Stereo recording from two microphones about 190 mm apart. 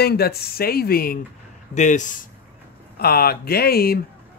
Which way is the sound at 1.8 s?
40° left (ahead or behind).